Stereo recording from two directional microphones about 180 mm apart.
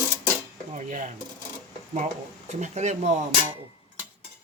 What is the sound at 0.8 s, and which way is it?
Speech, 45° right (ahead or behind).